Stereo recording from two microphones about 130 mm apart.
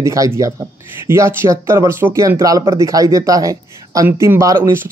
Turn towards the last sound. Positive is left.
turn(degrees=-20)  # may be behind; listen again after turning